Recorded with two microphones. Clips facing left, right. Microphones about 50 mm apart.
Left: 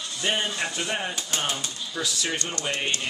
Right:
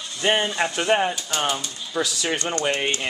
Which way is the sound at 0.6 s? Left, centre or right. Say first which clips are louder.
Right 8 dB; right.